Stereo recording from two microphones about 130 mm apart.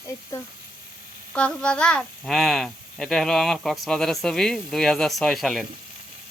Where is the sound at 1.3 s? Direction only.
5° left (ahead or behind).